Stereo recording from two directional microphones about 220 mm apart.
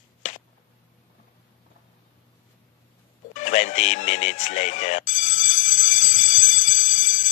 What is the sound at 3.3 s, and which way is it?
Speech, 35° left (ahead or behind).